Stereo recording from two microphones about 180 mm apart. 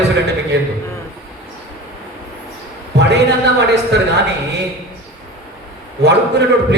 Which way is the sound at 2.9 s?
70° right (ahead or behind).